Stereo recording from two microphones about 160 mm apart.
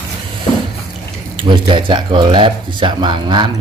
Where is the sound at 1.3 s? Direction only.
30° right (ahead or behind).